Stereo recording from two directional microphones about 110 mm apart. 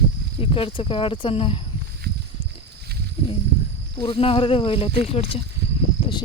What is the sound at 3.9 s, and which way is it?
Speech, 55° left (ahead or behind).